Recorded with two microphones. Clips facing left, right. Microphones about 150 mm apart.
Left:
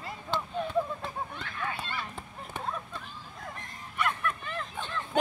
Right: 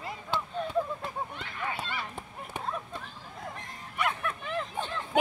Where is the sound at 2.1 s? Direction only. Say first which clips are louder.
Right 1 dB; 15° right (ahead or behind).